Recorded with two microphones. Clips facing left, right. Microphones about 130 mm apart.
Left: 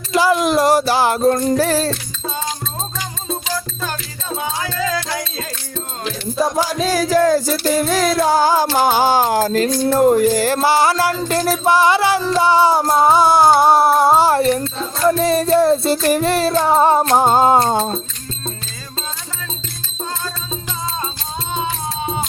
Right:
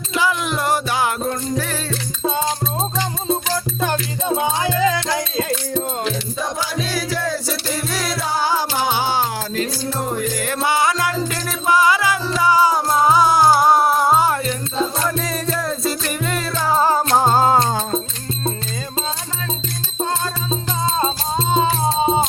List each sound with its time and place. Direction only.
0.1 s music: 40° left (ahead or behind)
3.8 s music: 20° right (ahead or behind)
6.4 s music: 40° left (ahead or behind)
10.2 s music: 35° left (ahead or behind)
20.5 s music: 25° right (ahead or behind)